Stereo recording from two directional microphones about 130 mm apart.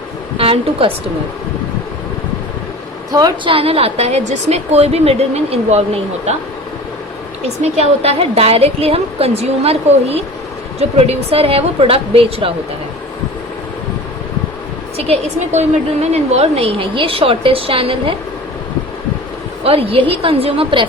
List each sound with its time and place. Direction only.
0.3 s a woman's voice: 45° right (ahead or behind)
3.1 s a woman's voice: 30° right (ahead or behind)
3.5 s a woman's voice: 50° right (ahead or behind)
7.4 s a woman's voice: 55° right (ahead or behind)
14.9 s a woman's voice: 50° right (ahead or behind)
19.6 s a woman's voice: 45° right (ahead or behind)